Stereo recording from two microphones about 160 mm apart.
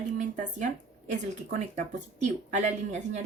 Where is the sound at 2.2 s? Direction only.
45° right (ahead or behind).